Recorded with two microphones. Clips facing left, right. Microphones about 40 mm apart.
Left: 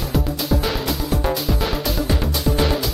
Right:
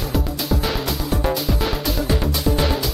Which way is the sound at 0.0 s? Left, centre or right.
Centre.